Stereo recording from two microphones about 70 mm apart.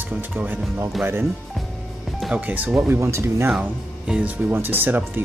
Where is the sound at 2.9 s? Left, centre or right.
Right.